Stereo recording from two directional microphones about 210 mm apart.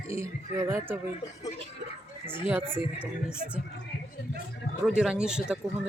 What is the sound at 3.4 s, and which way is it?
Speech, 40° right (ahead or behind).